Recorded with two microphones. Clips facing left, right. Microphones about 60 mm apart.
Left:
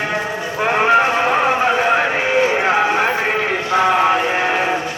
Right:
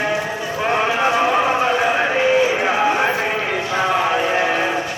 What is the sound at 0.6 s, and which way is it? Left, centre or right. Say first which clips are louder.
Livestock: left 5 dB; left.